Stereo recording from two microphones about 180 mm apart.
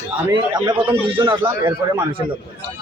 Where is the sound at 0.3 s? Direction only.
20° right (ahead or behind).